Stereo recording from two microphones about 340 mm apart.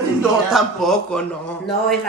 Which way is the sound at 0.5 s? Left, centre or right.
Centre.